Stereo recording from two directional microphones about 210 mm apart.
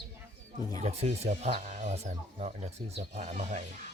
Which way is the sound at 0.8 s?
30° right (ahead or behind).